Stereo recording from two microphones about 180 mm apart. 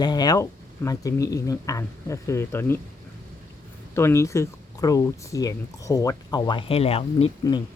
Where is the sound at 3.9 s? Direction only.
15° left (ahead or behind); by 7.3 s 35° left (ahead or behind).